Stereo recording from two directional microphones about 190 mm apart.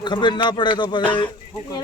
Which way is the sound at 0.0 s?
25° left (ahead or behind).